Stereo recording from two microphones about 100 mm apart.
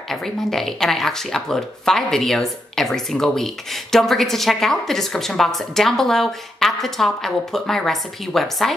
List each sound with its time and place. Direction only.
0.1 s speech: 5° left (ahead or behind)